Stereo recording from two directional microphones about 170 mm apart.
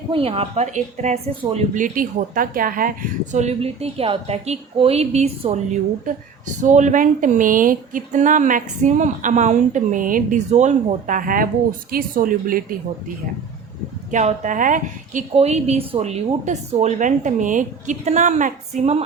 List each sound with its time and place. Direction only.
0.1 s a woman's voice: 35° right (ahead or behind); by 12.6 s 55° right (ahead or behind)
14.1 s a woman's voice: 45° right (ahead or behind)